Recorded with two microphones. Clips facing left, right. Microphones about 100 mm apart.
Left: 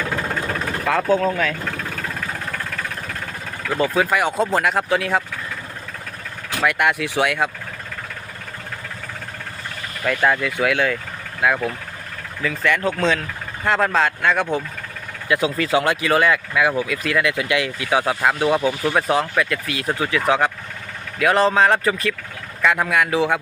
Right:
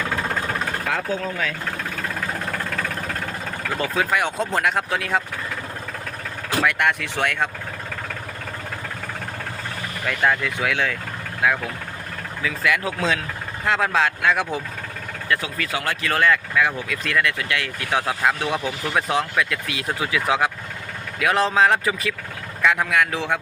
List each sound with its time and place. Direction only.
0.9 s speech: 60° left (ahead or behind)
3.8 s speech: centre (ahead or behind)
6.6 s speech: 5° left (ahead or behind)
10.1 s speech: centre (ahead or behind)
15.3 s speech: 20° left (ahead or behind)
16.0 s speech: 10° left (ahead or behind)